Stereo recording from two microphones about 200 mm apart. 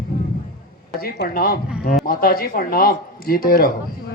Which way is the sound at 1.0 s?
50° left (ahead or behind).